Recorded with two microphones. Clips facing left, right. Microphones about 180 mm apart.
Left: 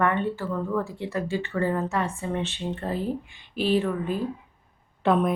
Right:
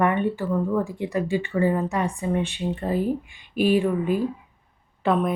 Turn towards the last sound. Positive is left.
turn(degrees=0)  # may be behind; listen again after turning